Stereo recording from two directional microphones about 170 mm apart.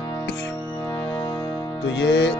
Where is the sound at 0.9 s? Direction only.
30° left (ahead or behind).